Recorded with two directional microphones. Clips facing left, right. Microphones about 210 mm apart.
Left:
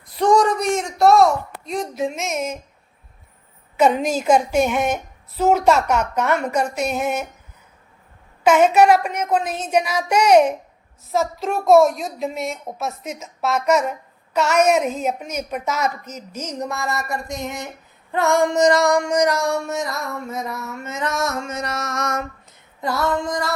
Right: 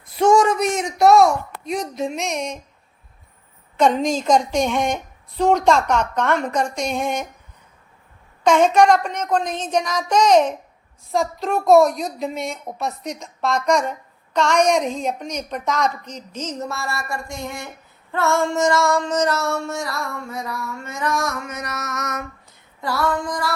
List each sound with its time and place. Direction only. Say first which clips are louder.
0.2 s a sound: right 1 dB; centre (ahead or behind)
1.6 s a woman's voice: even; centre (ahead or behind)
3.8 s a woman's voice: even; 5° left (ahead or behind)
8.4 s a woman's voice: left 1 dB; 5° left (ahead or behind)
18.1 s child singing: left 2 dB; 15° left (ahead or behind)